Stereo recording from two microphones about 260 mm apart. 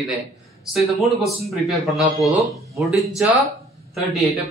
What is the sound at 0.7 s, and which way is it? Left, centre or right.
Speech, centre.